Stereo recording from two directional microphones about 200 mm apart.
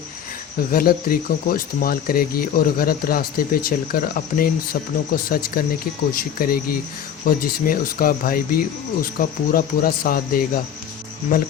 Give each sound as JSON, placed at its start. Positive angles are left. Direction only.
{"t": 0.7, "sound": "speech", "side_deg": 45}